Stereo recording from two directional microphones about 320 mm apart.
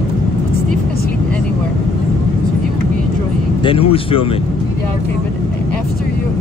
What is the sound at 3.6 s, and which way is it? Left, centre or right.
Speech, centre.